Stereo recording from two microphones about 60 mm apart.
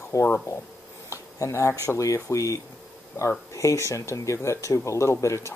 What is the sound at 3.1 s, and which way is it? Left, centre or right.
Speech, left.